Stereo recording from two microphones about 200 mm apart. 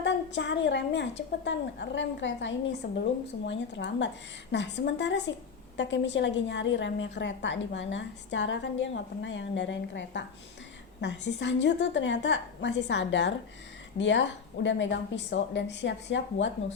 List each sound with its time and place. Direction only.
0.0 s a woman's voice: 60° left (ahead or behind)